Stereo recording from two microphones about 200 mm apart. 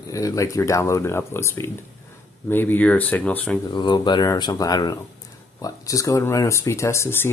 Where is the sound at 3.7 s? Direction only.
25° left (ahead or behind).